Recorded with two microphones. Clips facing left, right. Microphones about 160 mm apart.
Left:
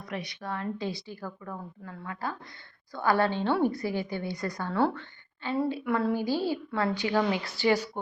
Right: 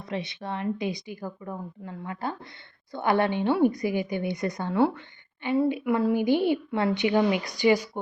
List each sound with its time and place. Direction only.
0.0 s a woman's voice: 25° right (ahead or behind)